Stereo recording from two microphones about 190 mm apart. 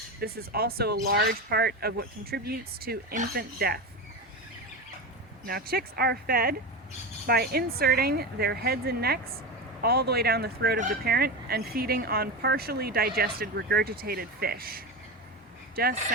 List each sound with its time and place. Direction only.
0.2 s speech: 55° right (ahead or behind)
5.5 s a woman's voice: 55° right (ahead or behind)